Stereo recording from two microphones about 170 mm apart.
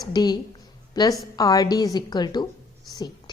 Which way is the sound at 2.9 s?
25° left (ahead or behind).